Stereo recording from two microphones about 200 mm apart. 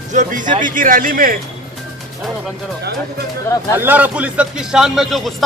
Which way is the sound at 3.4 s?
15° left (ahead or behind).